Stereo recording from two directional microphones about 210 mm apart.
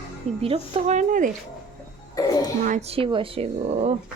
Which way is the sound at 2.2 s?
15° left (ahead or behind).